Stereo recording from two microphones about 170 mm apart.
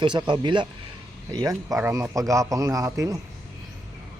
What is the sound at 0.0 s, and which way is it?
A man's voice, 25° right (ahead or behind).